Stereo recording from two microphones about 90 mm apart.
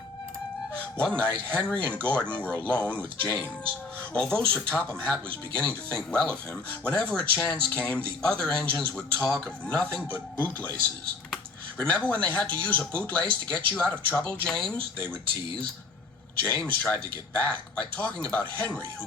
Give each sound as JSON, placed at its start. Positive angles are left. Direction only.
{"t": 0.8, "sound": "a man's voice", "side_deg": 10}
{"t": 11.8, "sound": "a man's voice", "side_deg": 15}
{"t": 13.2, "sound": "speech", "side_deg": -70}
{"t": 13.7, "sound": "a man's voice", "side_deg": 15}
{"t": 16.4, "sound": "a man's voice", "side_deg": 15}